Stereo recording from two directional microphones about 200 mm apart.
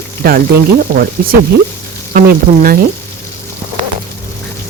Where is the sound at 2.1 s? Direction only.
45° right (ahead or behind).